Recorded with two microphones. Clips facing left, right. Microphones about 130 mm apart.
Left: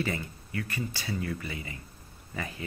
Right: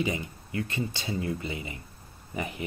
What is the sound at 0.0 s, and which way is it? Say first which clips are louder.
Speech: right 2 dB; 20° right (ahead or behind).